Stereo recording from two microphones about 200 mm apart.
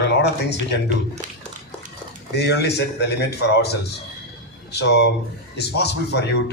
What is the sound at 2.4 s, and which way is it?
A man's voice, 55° left (ahead or behind).